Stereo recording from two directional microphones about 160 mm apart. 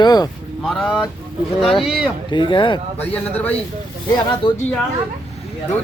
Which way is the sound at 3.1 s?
10° left (ahead or behind).